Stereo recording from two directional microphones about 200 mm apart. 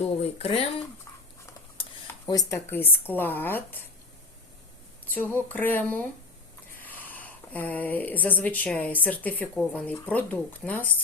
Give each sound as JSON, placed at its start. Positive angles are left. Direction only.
{"t": 0.2, "sound": "speech", "side_deg": 30}
{"t": 1.8, "sound": "a sound", "side_deg": 20}
{"t": 2.5, "sound": "speech", "side_deg": 10}
{"t": 5.1, "sound": "speech", "side_deg": 10}